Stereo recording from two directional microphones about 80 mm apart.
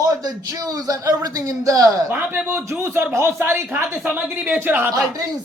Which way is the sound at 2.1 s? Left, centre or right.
Right.